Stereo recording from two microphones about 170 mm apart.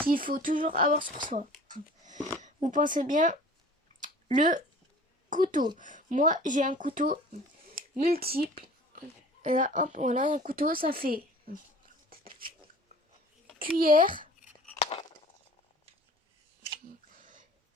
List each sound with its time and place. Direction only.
0.1 s speech: 55° right (ahead or behind)
2.4 s speech: 45° right (ahead or behind)
4.4 s a woman's voice: 50° right (ahead or behind)
12.1 s a sound: 60° right (ahead or behind)
13.6 s speech: 60° right (ahead or behind)
14.8 s a sound: 35° left (ahead or behind)